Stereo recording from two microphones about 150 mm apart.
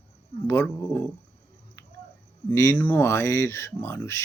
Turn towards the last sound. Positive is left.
turn(degrees=15)  # may be behind; listen again after turning